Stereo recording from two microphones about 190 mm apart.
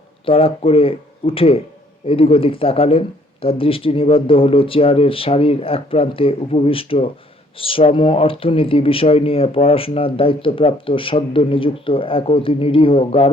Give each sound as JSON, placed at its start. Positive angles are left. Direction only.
{"t": 0.3, "sound": "speech", "side_deg": 30}